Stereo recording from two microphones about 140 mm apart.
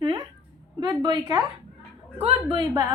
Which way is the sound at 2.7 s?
25° right (ahead or behind).